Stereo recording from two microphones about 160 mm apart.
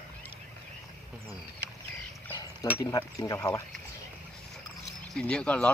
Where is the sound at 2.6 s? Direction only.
25° left (ahead or behind).